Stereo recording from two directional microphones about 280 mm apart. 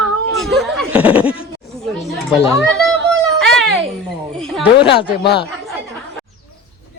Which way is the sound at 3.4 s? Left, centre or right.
Centre.